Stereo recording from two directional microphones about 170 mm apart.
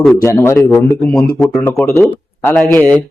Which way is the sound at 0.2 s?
15° left (ahead or behind).